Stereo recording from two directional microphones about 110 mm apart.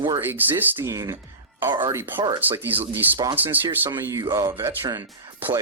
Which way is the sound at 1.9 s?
25° right (ahead or behind).